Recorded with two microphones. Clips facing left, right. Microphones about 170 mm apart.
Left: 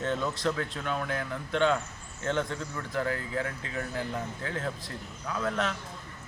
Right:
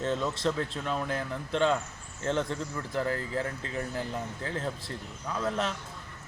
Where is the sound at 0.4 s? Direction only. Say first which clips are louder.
Right 1 dB; 30° right (ahead or behind).